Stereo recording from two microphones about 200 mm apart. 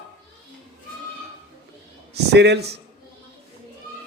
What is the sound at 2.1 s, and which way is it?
Speech, 55° right (ahead or behind).